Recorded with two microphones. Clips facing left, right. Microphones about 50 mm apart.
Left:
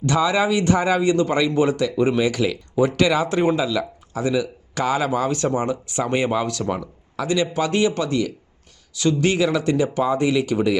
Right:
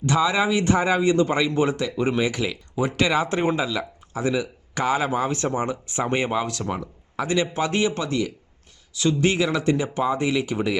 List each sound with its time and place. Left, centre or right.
0.0 s speech: centre